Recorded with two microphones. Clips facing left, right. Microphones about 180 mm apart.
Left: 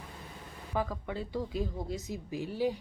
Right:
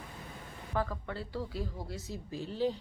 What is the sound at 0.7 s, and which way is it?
Speech, 15° left (ahead or behind).